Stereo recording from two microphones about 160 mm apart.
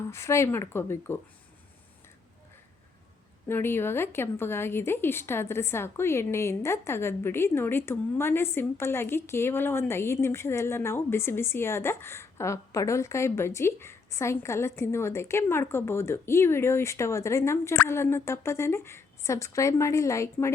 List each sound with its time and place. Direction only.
0.1 s a woman's voice: 15° left (ahead or behind)
3.4 s a woman's voice: 15° left (ahead or behind)